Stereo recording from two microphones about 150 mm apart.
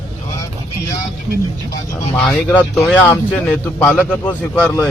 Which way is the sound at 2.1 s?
10° left (ahead or behind).